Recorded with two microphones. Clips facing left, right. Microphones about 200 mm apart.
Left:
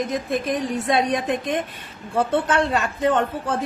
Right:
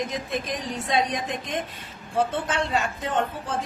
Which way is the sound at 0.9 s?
60° left (ahead or behind).